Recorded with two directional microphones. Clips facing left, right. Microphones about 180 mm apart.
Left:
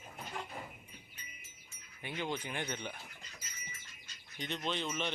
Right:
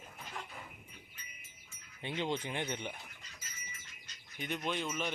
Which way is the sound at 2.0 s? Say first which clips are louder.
Right 3 dB; 25° right (ahead or behind).